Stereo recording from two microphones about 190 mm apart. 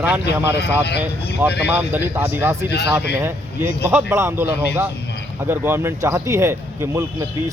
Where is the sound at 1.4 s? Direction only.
10° right (ahead or behind).